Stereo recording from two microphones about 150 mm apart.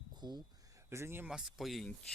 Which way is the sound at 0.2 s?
30° right (ahead or behind).